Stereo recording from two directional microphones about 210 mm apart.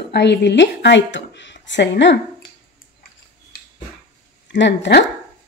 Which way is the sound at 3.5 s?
45° left (ahead or behind).